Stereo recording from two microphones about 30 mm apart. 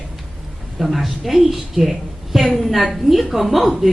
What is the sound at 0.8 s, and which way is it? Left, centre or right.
A woman's voice, centre.